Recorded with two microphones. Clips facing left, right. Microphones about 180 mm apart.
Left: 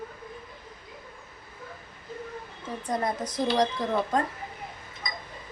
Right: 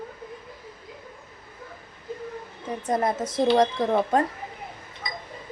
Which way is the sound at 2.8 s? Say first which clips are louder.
Right 4 dB; 25° right (ahead or behind).